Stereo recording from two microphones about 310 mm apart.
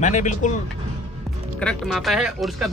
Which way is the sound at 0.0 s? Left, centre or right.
Left.